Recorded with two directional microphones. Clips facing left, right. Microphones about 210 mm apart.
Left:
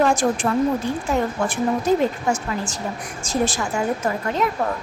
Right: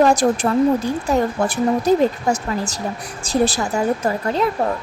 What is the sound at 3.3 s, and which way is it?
Speech, 35° right (ahead or behind).